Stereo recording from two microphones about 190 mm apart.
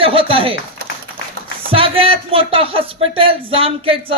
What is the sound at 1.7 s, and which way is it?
Speech, 30° right (ahead or behind).